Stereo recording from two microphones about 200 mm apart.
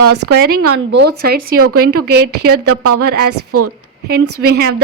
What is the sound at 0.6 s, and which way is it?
A woman's voice, 60° right (ahead or behind).